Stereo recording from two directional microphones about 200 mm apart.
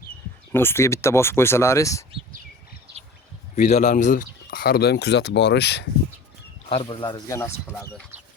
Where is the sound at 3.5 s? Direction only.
35° left (ahead or behind); by 5.8 s 60° left (ahead or behind).